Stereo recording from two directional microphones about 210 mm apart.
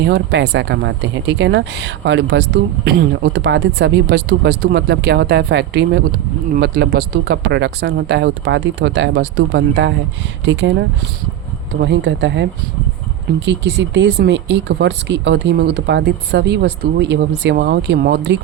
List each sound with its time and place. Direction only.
0.0 s speech: 55° right (ahead or behind)